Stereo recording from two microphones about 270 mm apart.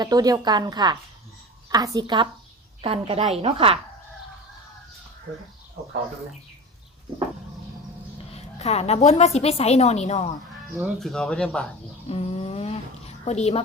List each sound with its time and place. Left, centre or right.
0.0 s a woman's voice: centre
8.3 s a woman's voice: left
10.8 s speech: centre
12.0 s a woman's voice: left